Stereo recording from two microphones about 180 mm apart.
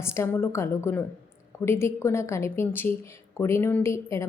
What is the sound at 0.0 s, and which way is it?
A woman's voice, 15° left (ahead or behind).